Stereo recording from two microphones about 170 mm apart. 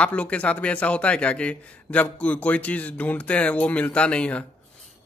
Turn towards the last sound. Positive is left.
turn(degrees=5)  # may be behind; listen again after turning